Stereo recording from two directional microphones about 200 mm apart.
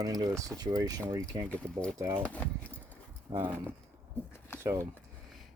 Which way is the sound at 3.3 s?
20° right (ahead or behind).